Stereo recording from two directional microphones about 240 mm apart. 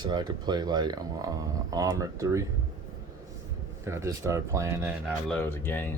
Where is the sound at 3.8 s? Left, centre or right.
Centre.